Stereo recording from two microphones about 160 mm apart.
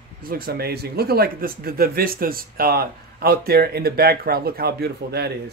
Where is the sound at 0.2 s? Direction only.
65° right (ahead or behind).